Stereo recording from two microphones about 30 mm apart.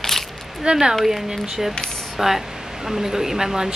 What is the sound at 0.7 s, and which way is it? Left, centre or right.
Speech, right.